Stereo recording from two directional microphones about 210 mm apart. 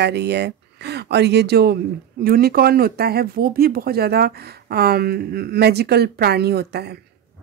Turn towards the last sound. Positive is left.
turn(degrees=-50)  # may be behind; listen again after turning